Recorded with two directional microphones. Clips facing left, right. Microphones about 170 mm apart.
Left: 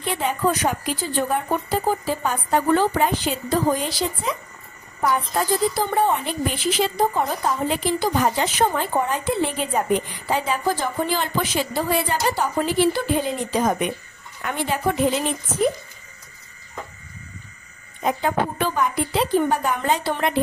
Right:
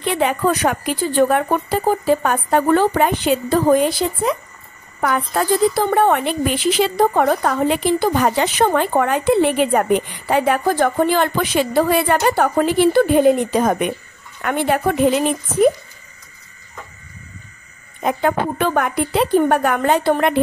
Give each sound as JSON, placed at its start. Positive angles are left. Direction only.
{"t": 0.0, "sound": "a woman's voice", "side_deg": -70}
{"t": 5.0, "sound": "a woman's voice", "side_deg": -75}
{"t": 18.0, "sound": "a woman's voice", "side_deg": -60}